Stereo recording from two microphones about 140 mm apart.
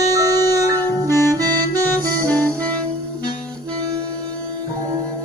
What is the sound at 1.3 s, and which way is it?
Saxophone, 25° right (ahead or behind).